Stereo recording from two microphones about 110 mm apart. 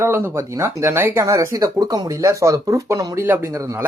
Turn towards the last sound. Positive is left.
turn(degrees=-30)  # may be behind; listen again after turning